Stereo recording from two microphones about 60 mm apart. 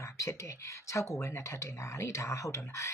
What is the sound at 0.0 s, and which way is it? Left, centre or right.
Speech, left.